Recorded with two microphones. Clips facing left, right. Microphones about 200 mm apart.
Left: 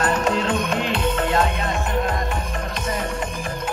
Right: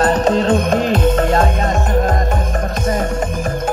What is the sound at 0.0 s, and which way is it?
Music, 35° right (ahead or behind).